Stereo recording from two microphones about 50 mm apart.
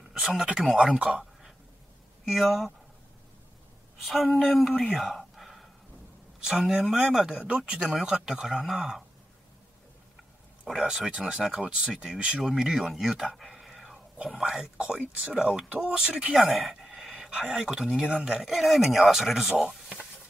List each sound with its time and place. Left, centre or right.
0.1 s a sound: centre
0.7 s speech: centre
2.2 s speech: centre
4.0 s speech: centre
4.9 s a sound: centre
7.0 s speech: centre
7.8 s speech: centre
10.6 s speech: centre
13.4 s a sound: centre
14.4 s speech: centre
16.3 s speech: centre
17.1 s speech: centre
19.6 s a sound: centre